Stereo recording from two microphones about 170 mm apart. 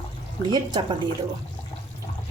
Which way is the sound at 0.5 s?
25° right (ahead or behind).